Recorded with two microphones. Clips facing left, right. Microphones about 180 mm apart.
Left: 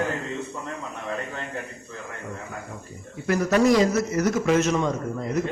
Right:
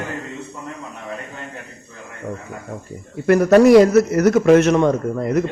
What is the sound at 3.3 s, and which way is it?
A man's voice, 60° right (ahead or behind).